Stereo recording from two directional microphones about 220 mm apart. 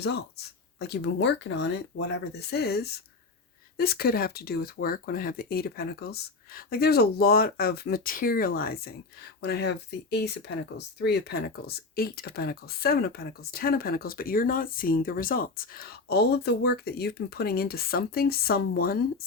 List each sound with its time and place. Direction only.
0.0 s speech: 50° left (ahead or behind)